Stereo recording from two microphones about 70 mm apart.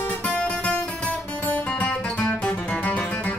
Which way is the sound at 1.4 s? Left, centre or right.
Left.